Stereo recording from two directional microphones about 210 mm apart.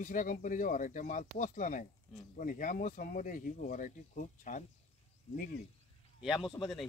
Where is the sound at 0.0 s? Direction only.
40° left (ahead or behind).